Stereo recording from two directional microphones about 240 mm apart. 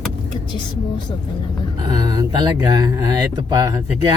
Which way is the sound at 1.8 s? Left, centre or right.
Centre.